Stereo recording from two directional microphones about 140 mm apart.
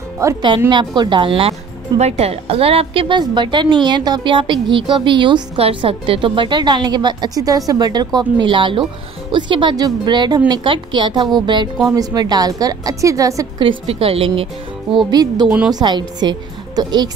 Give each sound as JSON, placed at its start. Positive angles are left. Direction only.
{"t": 0.2, "sound": "a woman's voice", "side_deg": -20}
{"t": 0.7, "sound": "a woman's voice", "side_deg": -35}
{"t": 2.0, "sound": "a woman's voice", "side_deg": -50}
{"t": 13.7, "sound": "a woman's voice", "side_deg": -45}
{"t": 15.0, "sound": "a woman's voice", "side_deg": -30}
{"t": 15.4, "sound": "a woman's voice", "side_deg": -10}
{"t": 15.7, "sound": "a woman's voice", "side_deg": -30}